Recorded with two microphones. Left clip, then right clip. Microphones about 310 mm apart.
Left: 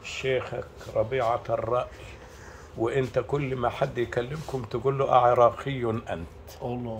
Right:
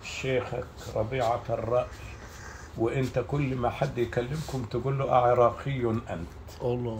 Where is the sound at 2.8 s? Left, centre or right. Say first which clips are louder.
Left 3 dB; centre.